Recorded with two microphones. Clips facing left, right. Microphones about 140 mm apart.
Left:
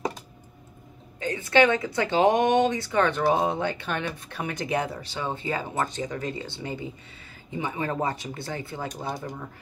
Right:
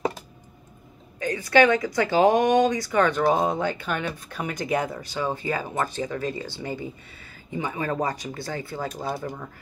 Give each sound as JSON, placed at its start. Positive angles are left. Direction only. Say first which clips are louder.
{"t": 1.2, "sound": "speech", "louder": "right 2 dB", "side_deg": 25}
{"t": 8.9, "sound": "speech", "louder": "right 3 dB", "side_deg": -5}